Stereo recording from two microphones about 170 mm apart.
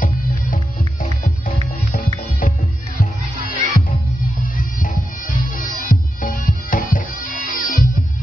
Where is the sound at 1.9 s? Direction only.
55° left (ahead or behind).